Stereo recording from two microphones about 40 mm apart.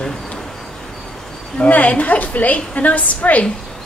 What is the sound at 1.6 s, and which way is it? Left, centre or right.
A woman's voice, left.